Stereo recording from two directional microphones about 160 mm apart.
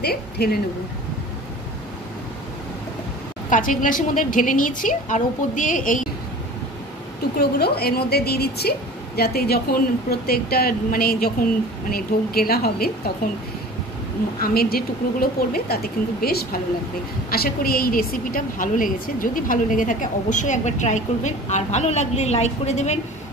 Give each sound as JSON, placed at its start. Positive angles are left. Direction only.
{"t": 0.0, "sound": "a woman's voice", "side_deg": 75}
{"t": 3.4, "sound": "a woman's voice", "side_deg": 55}
{"t": 7.3, "sound": "a woman's voice", "side_deg": 80}
{"t": 14.4, "sound": "a woman's voice", "side_deg": 70}